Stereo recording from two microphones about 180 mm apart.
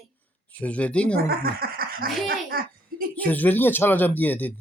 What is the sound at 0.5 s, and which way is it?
Speech, 5° left (ahead or behind).